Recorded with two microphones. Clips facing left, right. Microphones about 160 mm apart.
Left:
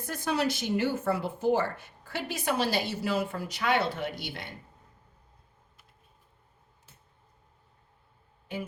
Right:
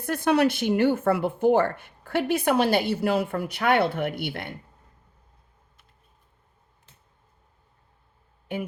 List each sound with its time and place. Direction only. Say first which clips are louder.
0.0 s speech: right 8 dB; 60° right (ahead or behind)